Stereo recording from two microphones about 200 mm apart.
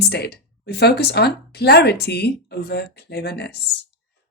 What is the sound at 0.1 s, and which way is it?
Speech, 55° left (ahead or behind).